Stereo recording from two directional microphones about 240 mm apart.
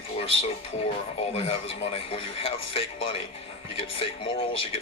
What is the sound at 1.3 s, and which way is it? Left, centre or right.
Speech, left.